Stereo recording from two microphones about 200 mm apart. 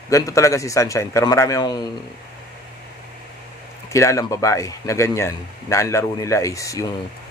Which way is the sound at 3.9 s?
15° left (ahead or behind).